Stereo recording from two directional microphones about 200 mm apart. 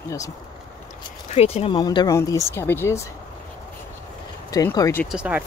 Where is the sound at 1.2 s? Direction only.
30° left (ahead or behind); by 3.1 s 15° left (ahead or behind).